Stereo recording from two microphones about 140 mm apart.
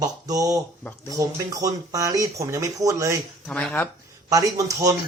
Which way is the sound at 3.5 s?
10° left (ahead or behind).